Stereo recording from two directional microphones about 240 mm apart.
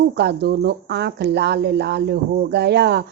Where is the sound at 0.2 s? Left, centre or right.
Right.